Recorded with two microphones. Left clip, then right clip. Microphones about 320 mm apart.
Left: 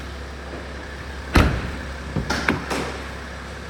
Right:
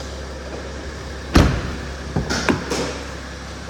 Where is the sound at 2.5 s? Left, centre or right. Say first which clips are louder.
Right 2 dB; right.